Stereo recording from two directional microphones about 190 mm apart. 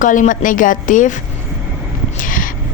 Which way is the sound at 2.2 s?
45° left (ahead or behind).